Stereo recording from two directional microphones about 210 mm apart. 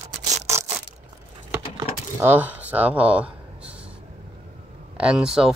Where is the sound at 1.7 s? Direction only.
10° right (ahead or behind).